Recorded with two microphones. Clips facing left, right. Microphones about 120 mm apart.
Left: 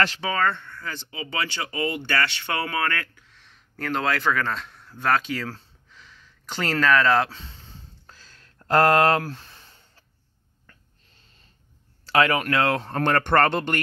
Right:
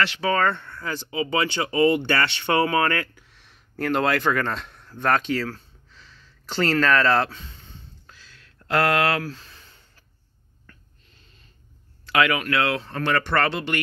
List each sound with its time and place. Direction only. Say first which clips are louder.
0.3 s speech: right 2 dB; centre (ahead or behind)
1.2 s speech: right 6 dB; 20° right (ahead or behind); by 5.5 s 10° left (ahead or behind)
5.9 s a sound: left 1 dB; 15° left (ahead or behind)
7.2 s a sound: right 1 dB; 30° left (ahead or behind)
8.6 s speech: left 3 dB; 40° left (ahead or behind)
12.1 s speech: left 1 dB; 35° left (ahead or behind)